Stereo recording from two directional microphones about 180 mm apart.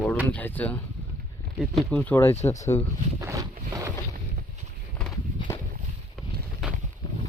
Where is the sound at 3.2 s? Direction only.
20° right (ahead or behind).